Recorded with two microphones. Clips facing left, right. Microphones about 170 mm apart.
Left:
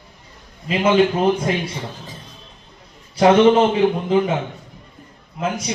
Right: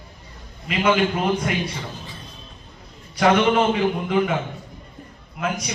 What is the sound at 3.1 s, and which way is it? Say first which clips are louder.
Speech: left 5 dB; 30° left (ahead or behind).